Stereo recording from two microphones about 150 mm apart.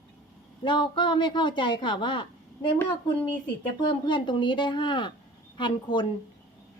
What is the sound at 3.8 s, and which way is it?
A woman's voice, 30° left (ahead or behind).